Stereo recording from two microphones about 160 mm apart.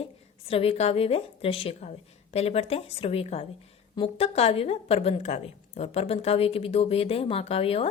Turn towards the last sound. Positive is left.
turn(degrees=35)  # may be behind; listen again after turning